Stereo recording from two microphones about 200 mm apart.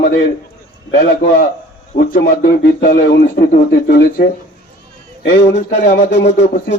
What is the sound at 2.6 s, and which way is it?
Speech, 45° left (ahead or behind).